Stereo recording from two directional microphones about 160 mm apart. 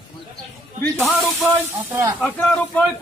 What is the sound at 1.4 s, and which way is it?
Speech, 15° right (ahead or behind).